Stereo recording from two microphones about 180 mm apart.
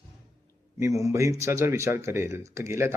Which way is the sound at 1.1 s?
15° right (ahead or behind).